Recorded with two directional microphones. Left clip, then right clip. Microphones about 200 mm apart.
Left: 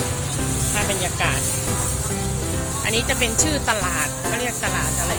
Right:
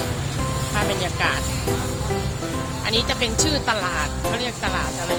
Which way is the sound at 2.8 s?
5° right (ahead or behind).